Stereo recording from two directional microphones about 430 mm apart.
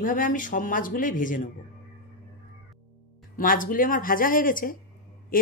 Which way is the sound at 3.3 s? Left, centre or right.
Centre.